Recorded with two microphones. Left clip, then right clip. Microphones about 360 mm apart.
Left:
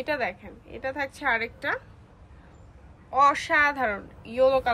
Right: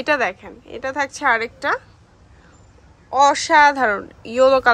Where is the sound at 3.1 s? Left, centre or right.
Centre.